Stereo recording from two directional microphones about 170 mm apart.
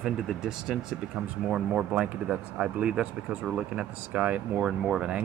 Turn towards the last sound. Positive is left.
turn(degrees=-5)  # may be behind; listen again after turning